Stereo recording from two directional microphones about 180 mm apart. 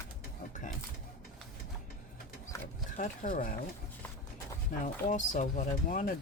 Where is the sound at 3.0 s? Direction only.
45° left (ahead or behind).